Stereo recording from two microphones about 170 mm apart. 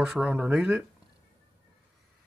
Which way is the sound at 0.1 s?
10° right (ahead or behind).